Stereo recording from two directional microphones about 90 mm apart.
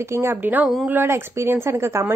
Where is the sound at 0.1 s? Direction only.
25° right (ahead or behind).